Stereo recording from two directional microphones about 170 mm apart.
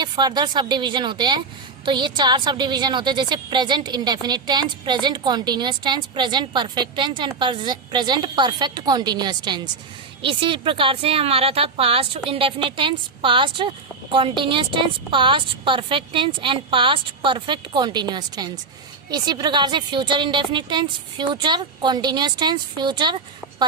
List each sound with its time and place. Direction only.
0.0 s a woman's voice: 25° right (ahead or behind)